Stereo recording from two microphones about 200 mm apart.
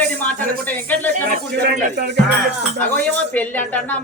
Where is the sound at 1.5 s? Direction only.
55° right (ahead or behind).